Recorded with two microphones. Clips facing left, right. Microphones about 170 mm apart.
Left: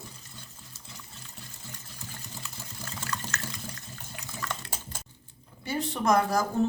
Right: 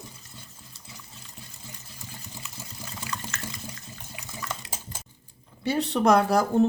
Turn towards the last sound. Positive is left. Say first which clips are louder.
# right 4 dB
turn(degrees=-70)  # may be behind; listen again after turning